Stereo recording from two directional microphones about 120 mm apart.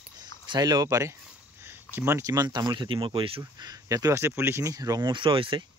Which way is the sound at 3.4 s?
30° right (ahead or behind).